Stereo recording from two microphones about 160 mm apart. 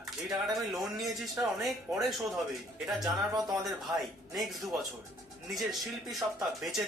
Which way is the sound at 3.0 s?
25° right (ahead or behind).